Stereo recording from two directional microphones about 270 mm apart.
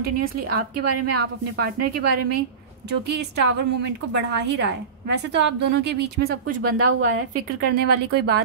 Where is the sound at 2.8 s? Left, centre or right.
Right.